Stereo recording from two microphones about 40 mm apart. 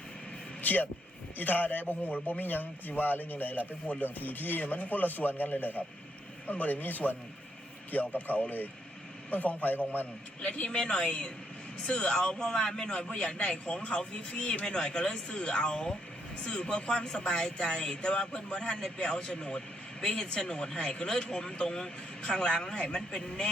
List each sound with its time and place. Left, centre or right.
0.6 s vehicle: left
1.4 s a man's voice: left
10.4 s speech: left